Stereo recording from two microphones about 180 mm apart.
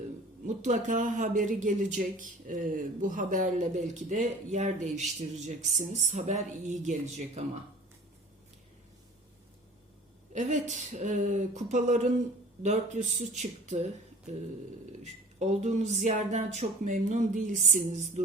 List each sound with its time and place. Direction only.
0.4 s speech: 40° right (ahead or behind)
10.3 s speech: 40° right (ahead or behind)
15.0 s speech: 40° right (ahead or behind)